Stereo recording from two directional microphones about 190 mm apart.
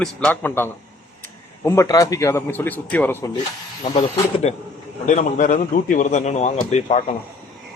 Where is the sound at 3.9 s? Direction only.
30° left (ahead or behind).